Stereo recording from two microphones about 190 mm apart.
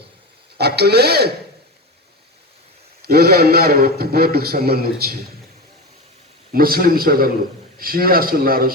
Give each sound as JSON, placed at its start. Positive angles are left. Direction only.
{"t": 0.6, "sound": "a man's voice", "side_deg": -60}
{"t": 3.1, "sound": "a man's voice", "side_deg": -55}
{"t": 6.5, "sound": "speech", "side_deg": -50}